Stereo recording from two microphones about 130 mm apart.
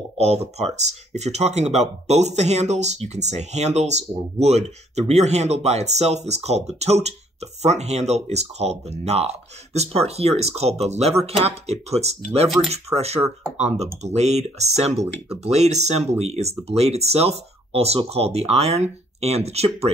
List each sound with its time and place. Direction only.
0.2 s speech: 55° right (ahead or behind)